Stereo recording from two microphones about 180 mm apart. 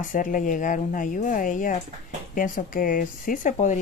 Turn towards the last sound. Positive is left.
turn(degrees=45)  # may be behind; listen again after turning